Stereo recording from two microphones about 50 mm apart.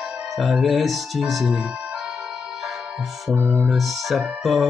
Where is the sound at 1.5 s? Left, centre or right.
Centre.